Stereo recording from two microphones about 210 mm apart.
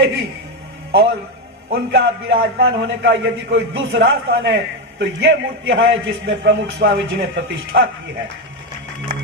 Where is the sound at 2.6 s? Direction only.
55° right (ahead or behind).